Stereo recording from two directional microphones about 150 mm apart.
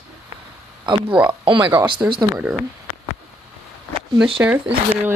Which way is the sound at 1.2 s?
30° right (ahead or behind).